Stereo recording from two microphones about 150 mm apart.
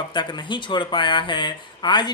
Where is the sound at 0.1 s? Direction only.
30° left (ahead or behind).